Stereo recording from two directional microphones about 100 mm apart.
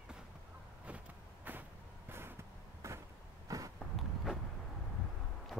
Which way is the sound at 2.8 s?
25° right (ahead or behind).